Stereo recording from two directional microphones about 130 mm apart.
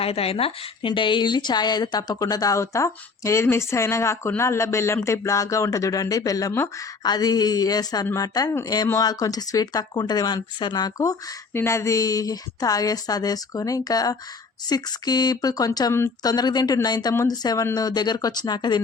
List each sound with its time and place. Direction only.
0.0 s speech: 50° left (ahead or behind); by 18.8 s 35° left (ahead or behind)